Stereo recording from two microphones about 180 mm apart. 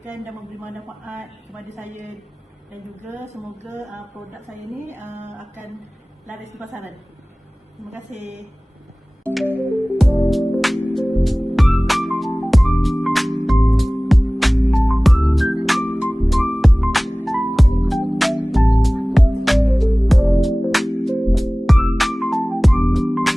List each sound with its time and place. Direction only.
3.1 s speech: 40° right (ahead or behind)
8.1 s speech: 40° right (ahead or behind)
9.5 s music: 10° right (ahead or behind)